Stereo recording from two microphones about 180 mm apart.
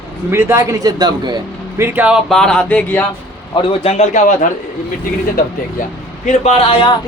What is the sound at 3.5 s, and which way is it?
Speech, 35° left (ahead or behind).